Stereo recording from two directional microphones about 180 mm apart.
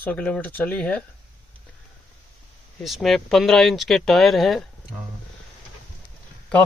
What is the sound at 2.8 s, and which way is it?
Speech, centre (ahead or behind).